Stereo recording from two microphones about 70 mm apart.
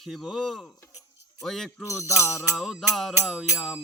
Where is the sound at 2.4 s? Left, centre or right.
Centre.